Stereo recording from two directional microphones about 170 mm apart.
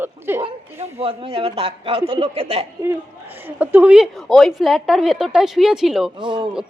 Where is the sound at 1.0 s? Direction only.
35° right (ahead or behind).